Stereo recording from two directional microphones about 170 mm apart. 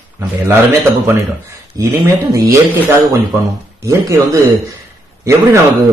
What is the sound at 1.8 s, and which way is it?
Speech, 15° right (ahead or behind).